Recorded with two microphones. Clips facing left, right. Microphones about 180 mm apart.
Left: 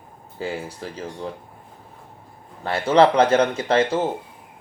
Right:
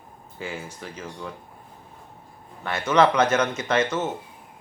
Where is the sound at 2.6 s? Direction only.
30° left (ahead or behind).